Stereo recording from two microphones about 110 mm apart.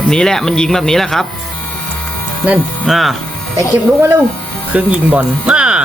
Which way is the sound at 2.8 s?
Centre (ahead or behind).